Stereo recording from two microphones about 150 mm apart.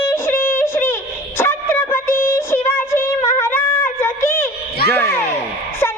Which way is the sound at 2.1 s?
70° left (ahead or behind).